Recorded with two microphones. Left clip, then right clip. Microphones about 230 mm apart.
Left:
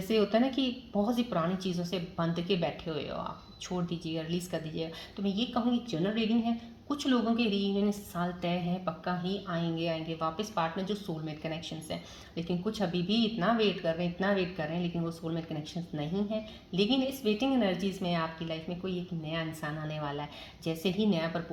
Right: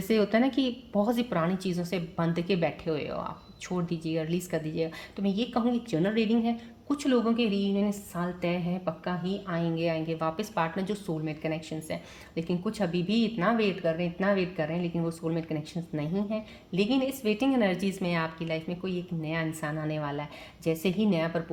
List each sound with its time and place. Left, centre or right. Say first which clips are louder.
0.1 s a woman's voice: right 2 dB; right
16.7 s a woman's voice: right 2 dB; right